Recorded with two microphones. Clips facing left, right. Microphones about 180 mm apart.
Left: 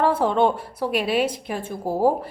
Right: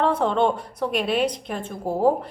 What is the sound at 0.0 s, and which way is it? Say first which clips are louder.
A woman's voice: left 1 dB; 5° left (ahead or behind).